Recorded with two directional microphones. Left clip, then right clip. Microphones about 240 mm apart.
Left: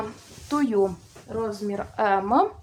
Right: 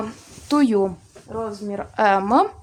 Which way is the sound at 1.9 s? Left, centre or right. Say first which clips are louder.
Right 5 dB; right.